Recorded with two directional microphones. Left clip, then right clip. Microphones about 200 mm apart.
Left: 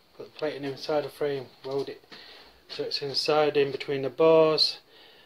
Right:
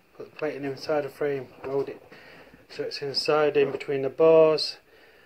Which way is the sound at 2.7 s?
5° left (ahead or behind).